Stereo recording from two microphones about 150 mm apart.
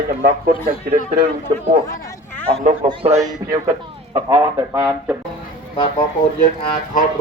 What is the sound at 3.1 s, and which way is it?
Speech, 25° right (ahead or behind).